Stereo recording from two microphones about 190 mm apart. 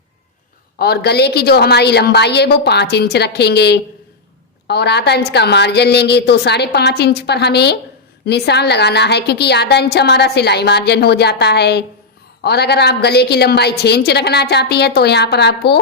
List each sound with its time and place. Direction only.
0.8 s a woman's voice: 55° left (ahead or behind)